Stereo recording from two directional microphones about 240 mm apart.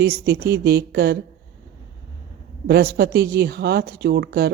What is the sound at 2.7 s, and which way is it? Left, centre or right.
A woman's voice, right.